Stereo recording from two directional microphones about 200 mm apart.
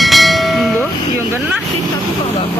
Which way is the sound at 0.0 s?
Centre (ahead or behind).